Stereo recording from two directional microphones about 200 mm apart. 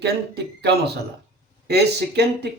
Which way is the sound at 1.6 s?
55° right (ahead or behind).